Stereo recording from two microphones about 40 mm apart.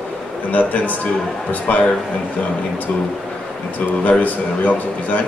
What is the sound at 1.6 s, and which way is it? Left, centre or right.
Speech, left.